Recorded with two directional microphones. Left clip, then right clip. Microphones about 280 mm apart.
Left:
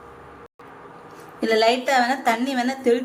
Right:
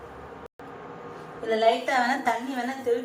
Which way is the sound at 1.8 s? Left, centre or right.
Left.